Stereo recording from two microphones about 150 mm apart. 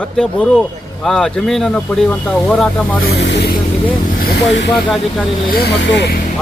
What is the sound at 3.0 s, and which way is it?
Speech, 90° left.